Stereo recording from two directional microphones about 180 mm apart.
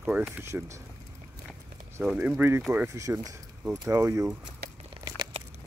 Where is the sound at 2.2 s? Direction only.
10° right (ahead or behind).